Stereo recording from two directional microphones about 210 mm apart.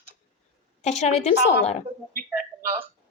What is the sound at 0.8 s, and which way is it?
Speech, 30° left (ahead or behind).